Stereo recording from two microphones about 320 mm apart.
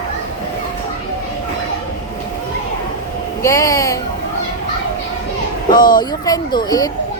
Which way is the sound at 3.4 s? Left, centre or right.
Centre.